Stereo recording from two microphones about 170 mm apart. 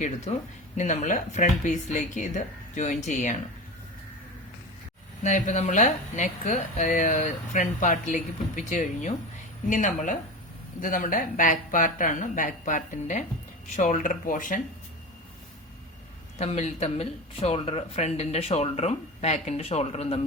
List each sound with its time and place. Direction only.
0.3 s speech: 45° left (ahead or behind)
5.2 s speech: 45° left (ahead or behind)
16.4 s speech: 40° left (ahead or behind)